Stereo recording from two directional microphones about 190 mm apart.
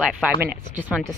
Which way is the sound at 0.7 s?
10° right (ahead or behind).